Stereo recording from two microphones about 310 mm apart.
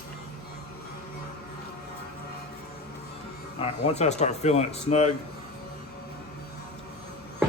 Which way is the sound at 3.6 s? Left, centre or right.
Left.